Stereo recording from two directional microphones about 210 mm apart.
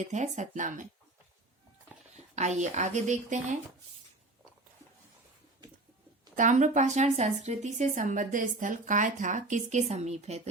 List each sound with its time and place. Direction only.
0.0 s speech: 35° right (ahead or behind)
2.1 s speech: 35° right (ahead or behind)
6.3 s speech: 35° right (ahead or behind)